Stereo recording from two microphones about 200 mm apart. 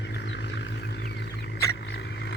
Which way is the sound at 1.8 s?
55° left (ahead or behind).